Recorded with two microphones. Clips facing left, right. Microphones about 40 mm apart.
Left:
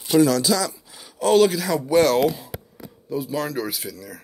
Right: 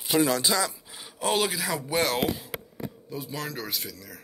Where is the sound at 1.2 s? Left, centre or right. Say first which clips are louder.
Left 9 dB; centre.